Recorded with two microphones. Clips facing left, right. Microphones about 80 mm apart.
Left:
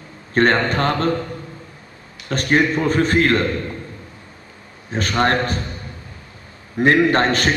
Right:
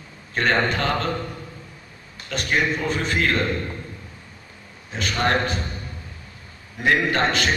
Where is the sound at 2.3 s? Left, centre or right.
Left.